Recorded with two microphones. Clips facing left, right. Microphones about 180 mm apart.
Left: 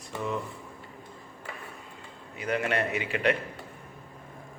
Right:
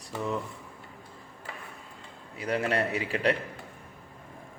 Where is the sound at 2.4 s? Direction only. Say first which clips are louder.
Even; 35° right (ahead or behind).